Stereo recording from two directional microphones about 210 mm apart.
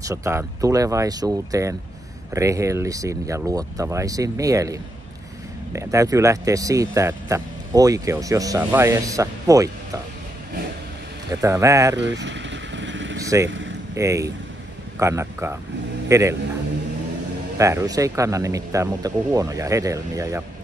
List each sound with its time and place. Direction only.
0.0 s speech: 15° right (ahead or behind)
11.2 s speech: 15° right (ahead or behind)
12.0 s vehicle: 55° right (ahead or behind)
13.2 s vehicle: 15° right (ahead or behind)
13.5 s a sound: 60° right (ahead or behind)
13.9 s speech: 15° right (ahead or behind)
17.6 s speech: 15° right (ahead or behind)